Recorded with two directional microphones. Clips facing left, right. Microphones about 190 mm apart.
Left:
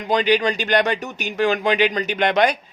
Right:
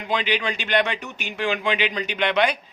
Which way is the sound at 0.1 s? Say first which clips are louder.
Left 7 dB; 40° left (ahead or behind).